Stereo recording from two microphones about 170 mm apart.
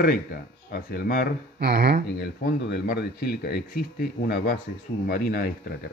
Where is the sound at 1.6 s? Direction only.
75° right (ahead or behind).